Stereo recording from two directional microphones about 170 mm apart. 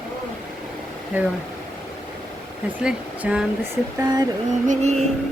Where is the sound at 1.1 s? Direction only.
10° right (ahead or behind).